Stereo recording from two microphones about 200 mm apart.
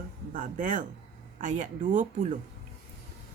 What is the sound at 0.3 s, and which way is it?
Speech, 40° right (ahead or behind).